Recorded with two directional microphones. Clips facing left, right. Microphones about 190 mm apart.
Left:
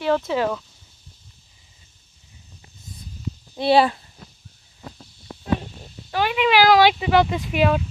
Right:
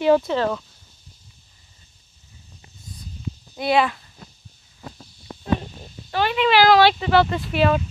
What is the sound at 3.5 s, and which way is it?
Speech, 30° left (ahead or behind).